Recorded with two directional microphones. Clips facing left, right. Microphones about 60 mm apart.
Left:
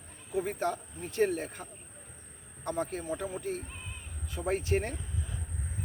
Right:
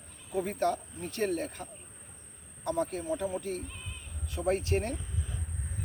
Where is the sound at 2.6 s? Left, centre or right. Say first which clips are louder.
Right 2 dB; left.